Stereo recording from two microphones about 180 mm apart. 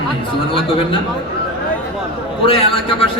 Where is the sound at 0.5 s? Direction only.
30° left (ahead or behind).